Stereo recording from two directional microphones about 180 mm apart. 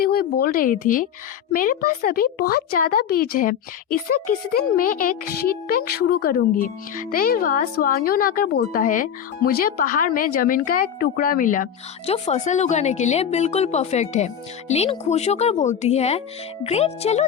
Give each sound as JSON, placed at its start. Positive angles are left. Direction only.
{"t": 0.0, "sound": "speech", "side_deg": 55}
{"t": 12.1, "sound": "a woman's voice", "side_deg": 35}